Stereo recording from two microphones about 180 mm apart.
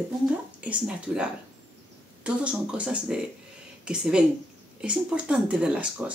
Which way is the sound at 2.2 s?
5° right (ahead or behind).